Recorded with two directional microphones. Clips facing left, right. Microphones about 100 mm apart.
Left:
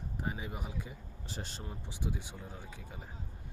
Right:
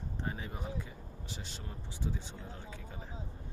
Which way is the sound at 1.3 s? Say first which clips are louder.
Left 4 dB; 40° left (ahead or behind).